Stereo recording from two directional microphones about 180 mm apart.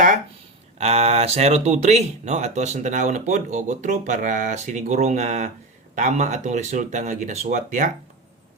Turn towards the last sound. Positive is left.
turn(degrees=-45)  # may be behind; listen again after turning